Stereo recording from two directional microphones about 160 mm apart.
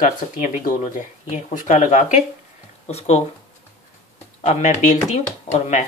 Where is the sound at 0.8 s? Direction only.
45° left (ahead or behind).